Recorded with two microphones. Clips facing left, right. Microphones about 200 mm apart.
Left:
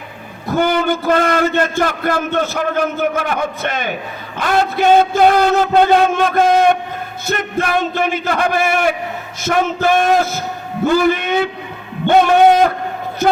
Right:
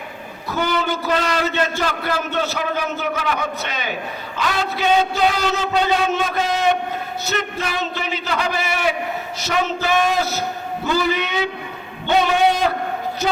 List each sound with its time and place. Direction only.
0.4 s a man's voice: 50° left (ahead or behind)